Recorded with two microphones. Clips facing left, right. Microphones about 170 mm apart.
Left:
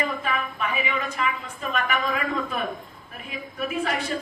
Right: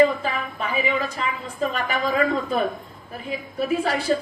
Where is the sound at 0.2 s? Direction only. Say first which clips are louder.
Right 1 dB; 30° right (ahead or behind).